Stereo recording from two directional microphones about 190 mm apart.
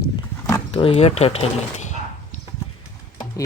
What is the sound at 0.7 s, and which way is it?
Speech, 30° left (ahead or behind).